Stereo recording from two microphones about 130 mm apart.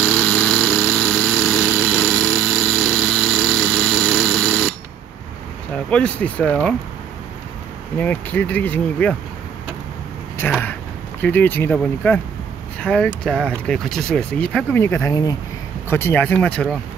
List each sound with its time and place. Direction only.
0.0 s vehicle: 5° left (ahead or behind)
1.9 s a sound: centre (ahead or behind)
5.9 s speech: 10° left (ahead or behind)
8.0 s speech: 15° left (ahead or behind)
10.6 s speech: 15° left (ahead or behind)
15.9 s speech: 15° left (ahead or behind)